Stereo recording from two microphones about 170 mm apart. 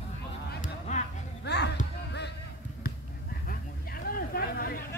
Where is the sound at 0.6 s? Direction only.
45° left (ahead or behind).